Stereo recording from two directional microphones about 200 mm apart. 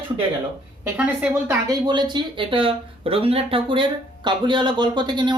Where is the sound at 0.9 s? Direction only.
10° right (ahead or behind).